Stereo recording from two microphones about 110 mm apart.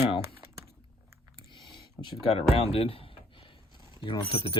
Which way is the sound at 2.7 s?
60° left (ahead or behind).